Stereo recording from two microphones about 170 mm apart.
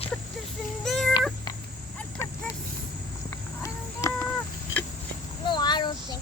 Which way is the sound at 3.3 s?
15° left (ahead or behind).